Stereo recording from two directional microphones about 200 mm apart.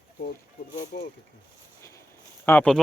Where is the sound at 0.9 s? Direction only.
45° left (ahead or behind).